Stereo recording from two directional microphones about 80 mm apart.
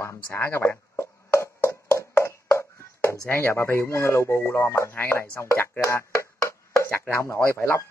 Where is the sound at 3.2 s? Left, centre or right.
Left.